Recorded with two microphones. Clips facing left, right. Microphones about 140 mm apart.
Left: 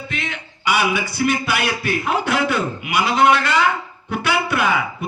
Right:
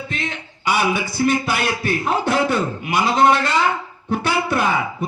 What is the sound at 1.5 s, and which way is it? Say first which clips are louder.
Music: right 1 dB; 45° right (ahead or behind).